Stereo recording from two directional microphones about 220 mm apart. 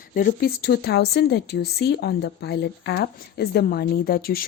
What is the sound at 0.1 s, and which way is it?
Speech, 40° left (ahead or behind).